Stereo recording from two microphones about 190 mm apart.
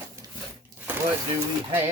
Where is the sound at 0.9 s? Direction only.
10° right (ahead or behind).